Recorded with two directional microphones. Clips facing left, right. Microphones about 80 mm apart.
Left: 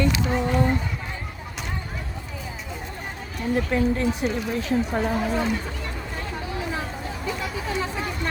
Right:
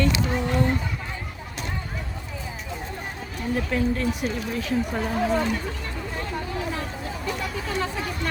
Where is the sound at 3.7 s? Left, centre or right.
Left.